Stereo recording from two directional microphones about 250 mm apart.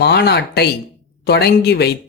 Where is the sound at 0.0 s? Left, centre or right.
Left.